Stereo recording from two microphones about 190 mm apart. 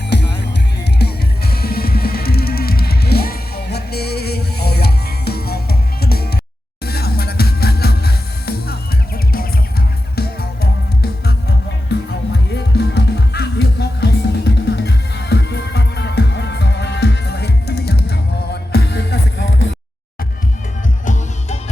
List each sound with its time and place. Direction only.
0.1 s music: 65° left (ahead or behind); by 19.7 s 80° left
21.0 s music: 40° left (ahead or behind)